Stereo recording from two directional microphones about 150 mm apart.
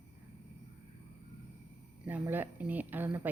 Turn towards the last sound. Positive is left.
turn(degrees=-10)  # may be behind; listen again after turning